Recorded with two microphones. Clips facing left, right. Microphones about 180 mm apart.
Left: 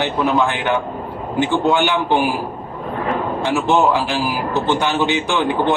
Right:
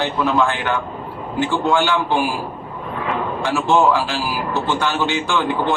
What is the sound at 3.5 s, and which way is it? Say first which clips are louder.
A man's voice: even; 20° left (ahead or behind).